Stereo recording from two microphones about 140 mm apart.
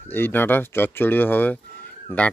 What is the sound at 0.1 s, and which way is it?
Speech, 15° left (ahead or behind).